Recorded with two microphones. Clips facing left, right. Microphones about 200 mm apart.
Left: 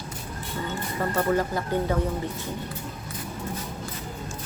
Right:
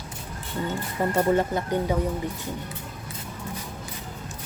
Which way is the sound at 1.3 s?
25° right (ahead or behind).